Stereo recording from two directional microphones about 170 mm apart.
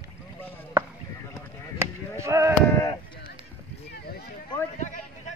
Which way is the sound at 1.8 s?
15° right (ahead or behind).